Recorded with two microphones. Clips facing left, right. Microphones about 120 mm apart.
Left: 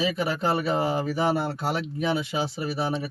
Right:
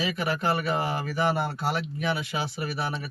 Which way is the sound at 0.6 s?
30° left (ahead or behind).